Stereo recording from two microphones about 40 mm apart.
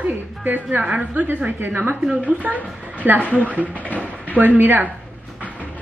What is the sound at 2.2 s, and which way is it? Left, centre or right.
Speech, right.